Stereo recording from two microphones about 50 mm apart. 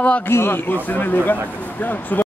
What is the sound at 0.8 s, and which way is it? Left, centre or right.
Speech, left.